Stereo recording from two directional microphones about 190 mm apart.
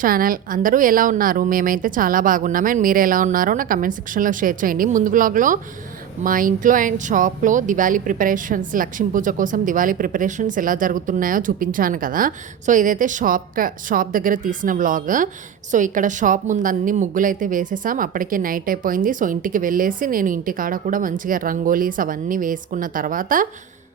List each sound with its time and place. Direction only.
0.0 s speech: 50° right (ahead or behind)